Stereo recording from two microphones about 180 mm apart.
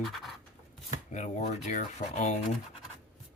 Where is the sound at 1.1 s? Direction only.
40° left (ahead or behind).